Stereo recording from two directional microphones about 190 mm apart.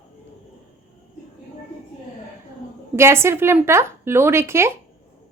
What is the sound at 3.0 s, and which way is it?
A woman's voice, 15° right (ahead or behind).